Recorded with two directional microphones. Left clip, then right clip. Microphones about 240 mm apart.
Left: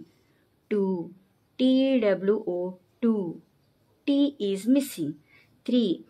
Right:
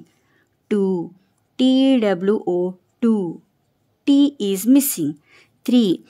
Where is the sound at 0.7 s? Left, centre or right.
Right.